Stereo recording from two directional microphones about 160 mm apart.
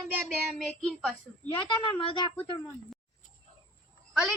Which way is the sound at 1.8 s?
30° left (ahead or behind).